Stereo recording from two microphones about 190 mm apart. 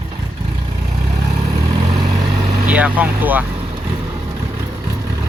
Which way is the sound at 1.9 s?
30° right (ahead or behind).